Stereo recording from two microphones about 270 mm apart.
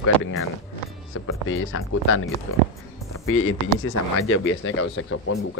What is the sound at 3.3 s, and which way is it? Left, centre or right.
Speech, left.